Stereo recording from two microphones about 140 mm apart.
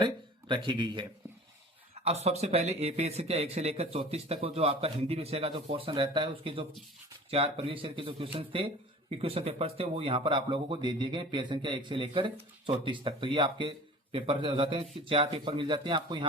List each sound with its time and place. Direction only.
0.0 s speech: 35° right (ahead or behind)
2.0 s a man's voice: 50° right (ahead or behind); by 16.2 s 30° right (ahead or behind)